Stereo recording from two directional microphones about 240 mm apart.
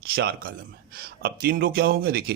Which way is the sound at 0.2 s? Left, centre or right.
Right.